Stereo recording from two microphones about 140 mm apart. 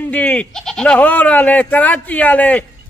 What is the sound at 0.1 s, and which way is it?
Speech, 10° left (ahead or behind).